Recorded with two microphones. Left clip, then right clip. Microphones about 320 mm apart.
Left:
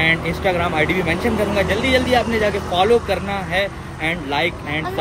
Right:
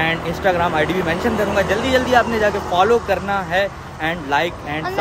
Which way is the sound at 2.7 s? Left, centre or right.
Centre.